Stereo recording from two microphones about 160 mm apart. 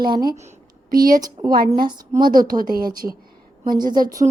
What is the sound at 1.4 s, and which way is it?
Speech, 40° right (ahead or behind).